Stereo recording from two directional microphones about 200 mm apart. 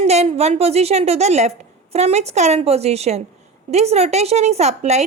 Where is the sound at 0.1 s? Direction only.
30° right (ahead or behind).